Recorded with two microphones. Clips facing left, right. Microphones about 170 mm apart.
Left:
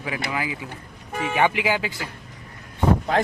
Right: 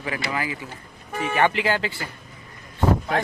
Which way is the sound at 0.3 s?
10° left (ahead or behind).